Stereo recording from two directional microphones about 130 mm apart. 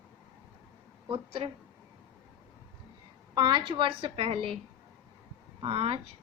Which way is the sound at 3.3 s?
35° right (ahead or behind).